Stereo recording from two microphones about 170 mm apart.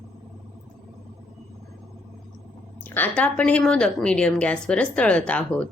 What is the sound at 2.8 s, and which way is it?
A woman's voice, 10° left (ahead or behind).